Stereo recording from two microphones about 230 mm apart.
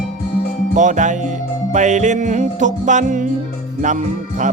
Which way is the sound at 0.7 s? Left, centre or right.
Right.